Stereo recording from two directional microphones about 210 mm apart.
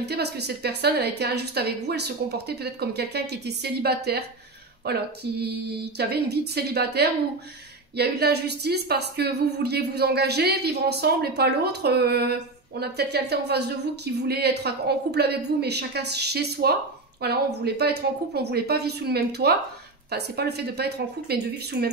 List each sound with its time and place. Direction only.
0.0 s a woman's voice: 50° right (ahead or behind)